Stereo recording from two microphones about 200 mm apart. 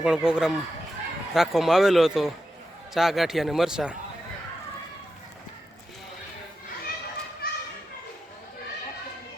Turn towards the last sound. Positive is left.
turn(degrees=50)  # may be behind; listen again after turning